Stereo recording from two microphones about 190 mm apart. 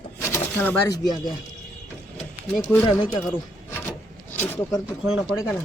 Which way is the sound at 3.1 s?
10° left (ahead or behind).